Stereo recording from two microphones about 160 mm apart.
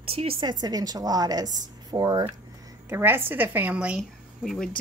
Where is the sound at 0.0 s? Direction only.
35° right (ahead or behind); by 4.0 s 5° right (ahead or behind).